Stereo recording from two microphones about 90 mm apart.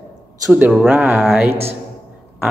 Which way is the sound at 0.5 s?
15° right (ahead or behind).